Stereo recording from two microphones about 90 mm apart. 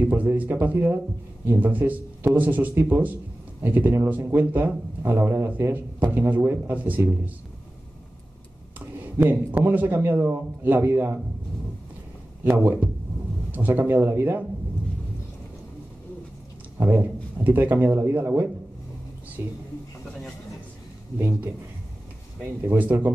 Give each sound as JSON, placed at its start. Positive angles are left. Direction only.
{"t": 0.0, "sound": "a man's voice", "side_deg": -25}
{"t": 8.7, "sound": "speech", "side_deg": -20}
{"t": 12.4, "sound": "a man's voice", "side_deg": -20}
{"t": 16.8, "sound": "a man's voice", "side_deg": -20}
{"t": 21.2, "sound": "a man's voice", "side_deg": -20}
{"t": 22.6, "sound": "a man's voice", "side_deg": -20}